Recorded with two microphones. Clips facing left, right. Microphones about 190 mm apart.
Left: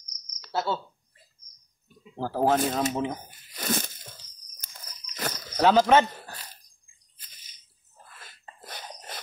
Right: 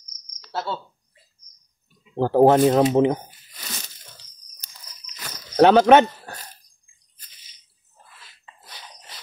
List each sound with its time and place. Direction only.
0.5 s speech: centre (ahead or behind)
2.1 s speech: 60° right (ahead or behind)
3.3 s tearing: 50° left (ahead or behind)
4.6 s crunch: 50° left (ahead or behind)
5.6 s speech: 65° right (ahead or behind)
8.2 s a sound: 50° left (ahead or behind)